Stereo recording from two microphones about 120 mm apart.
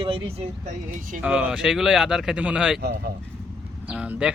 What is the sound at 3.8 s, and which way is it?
Speech, 10° right (ahead or behind).